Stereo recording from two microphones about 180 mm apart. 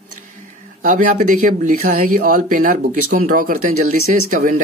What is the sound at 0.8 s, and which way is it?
Speech, 45° right (ahead or behind).